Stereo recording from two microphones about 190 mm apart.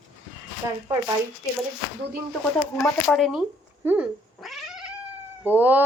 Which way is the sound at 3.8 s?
5° right (ahead or behind).